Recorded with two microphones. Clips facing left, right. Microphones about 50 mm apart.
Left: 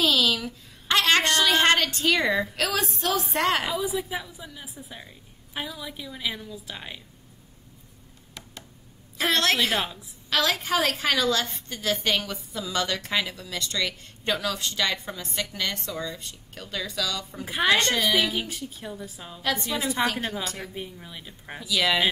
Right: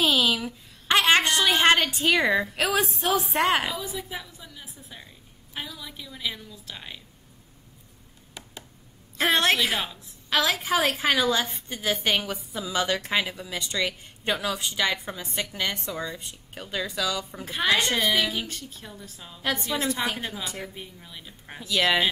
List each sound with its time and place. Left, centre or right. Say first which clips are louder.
0.0 s a sound: even; centre
2.5 s a woman's voice: right 2 dB; centre
3.7 s a woman's voice: left 5 dB; centre
9.3 s a woman's voice: right 1 dB; centre
9.6 s a woman's voice: left 1 dB; centre
10.3 s a woman's voice: right 1 dB; centre
17.5 s a woman's voice: left 2 dB; centre
17.7 s a woman's voice: left 1 dB; centre
18.1 s a woman's voice: left 1 dB; centre
19.4 s a woman's voice: left 1 dB; centre
19.8 s a woman's voice: left 2 dB; centre
20.4 s a woman's voice: even; centre
20.7 s a woman's voice: left 4 dB; centre
21.6 s a woman's voice: right 1 dB; centre